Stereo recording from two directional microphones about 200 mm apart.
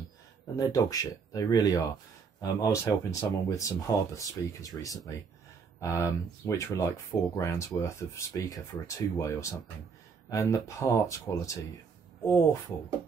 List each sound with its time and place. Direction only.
0.6 s speech: 15° left (ahead or behind)